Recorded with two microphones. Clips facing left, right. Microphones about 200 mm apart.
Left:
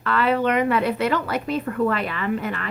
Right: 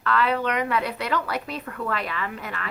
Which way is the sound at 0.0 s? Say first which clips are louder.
Left 3 dB; 5° left (ahead or behind).